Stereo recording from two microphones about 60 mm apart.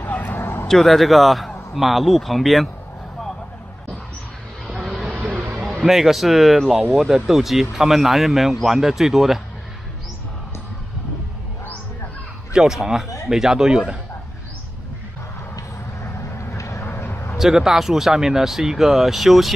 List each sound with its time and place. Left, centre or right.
0.0 s a sound: left
0.7 s speech: centre
4.6 s vehicle: centre
5.9 s speech: centre
12.5 s speech: centre
16.5 s vehicle: left
16.8 s a sound: left
17.4 s speech: centre